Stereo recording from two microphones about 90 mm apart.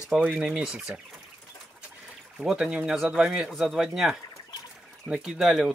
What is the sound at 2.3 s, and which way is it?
Speech, 5° right (ahead or behind).